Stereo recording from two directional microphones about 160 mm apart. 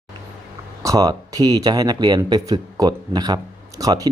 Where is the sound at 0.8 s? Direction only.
20° right (ahead or behind).